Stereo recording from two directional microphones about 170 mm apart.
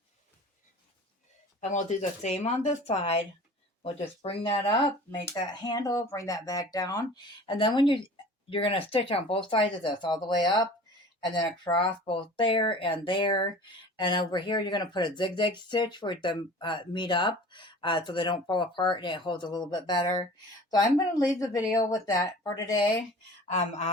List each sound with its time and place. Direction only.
1.6 s speech: 45° left (ahead or behind)
5.2 s speech: 20° left (ahead or behind)
23.5 s speech: 40° left (ahead or behind)